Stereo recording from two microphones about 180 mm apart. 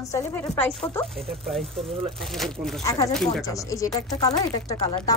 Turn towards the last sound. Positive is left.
turn(degrees=20)  # may be behind; listen again after turning